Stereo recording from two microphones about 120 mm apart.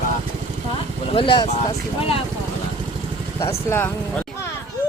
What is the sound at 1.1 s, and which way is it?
Speech, 45° left (ahead or behind).